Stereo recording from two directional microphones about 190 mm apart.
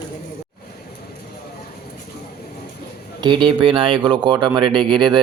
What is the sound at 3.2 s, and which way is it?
Speech, 25° right (ahead or behind).